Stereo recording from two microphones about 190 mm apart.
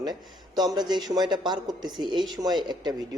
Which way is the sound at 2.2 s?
Centre (ahead or behind).